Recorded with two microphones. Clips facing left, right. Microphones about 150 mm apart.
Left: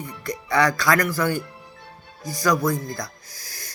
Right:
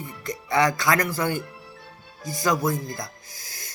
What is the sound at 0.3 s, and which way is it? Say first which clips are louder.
Speech: left 1 dB; 20° right (ahead or behind).